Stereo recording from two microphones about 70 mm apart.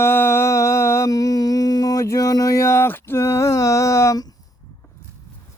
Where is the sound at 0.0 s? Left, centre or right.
Left.